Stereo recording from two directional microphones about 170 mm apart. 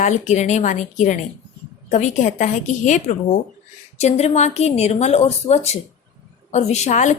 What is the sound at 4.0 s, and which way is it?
A woman's voice, 40° left (ahead or behind).